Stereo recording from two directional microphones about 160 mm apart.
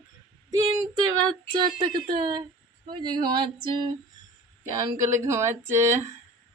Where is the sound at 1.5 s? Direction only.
30° right (ahead or behind).